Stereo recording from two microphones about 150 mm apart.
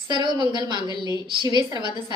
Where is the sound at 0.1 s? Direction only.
30° right (ahead or behind).